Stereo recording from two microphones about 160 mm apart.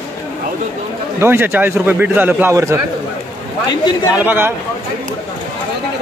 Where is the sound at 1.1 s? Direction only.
15° right (ahead or behind).